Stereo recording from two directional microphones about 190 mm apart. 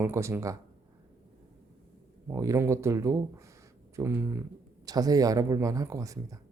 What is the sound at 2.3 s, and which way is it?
Speech, 15° right (ahead or behind).